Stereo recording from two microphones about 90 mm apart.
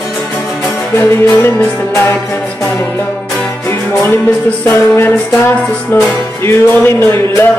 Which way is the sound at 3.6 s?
30° left (ahead or behind).